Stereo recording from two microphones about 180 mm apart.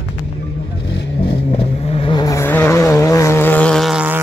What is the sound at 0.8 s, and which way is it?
Vehicle, 75° left (ahead or behind).